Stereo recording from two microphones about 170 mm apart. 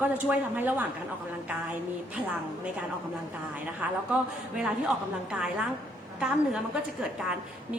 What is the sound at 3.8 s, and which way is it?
Speech, 10° right (ahead or behind).